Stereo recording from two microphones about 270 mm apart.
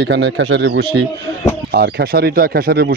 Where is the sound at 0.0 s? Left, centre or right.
Right.